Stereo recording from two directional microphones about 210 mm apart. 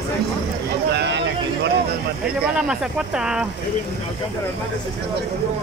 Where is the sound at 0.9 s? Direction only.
55° right (ahead or behind).